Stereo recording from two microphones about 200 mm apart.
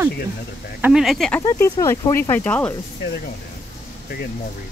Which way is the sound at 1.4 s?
15° left (ahead or behind).